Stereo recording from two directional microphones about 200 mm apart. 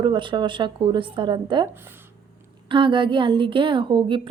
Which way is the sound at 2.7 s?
25° right (ahead or behind).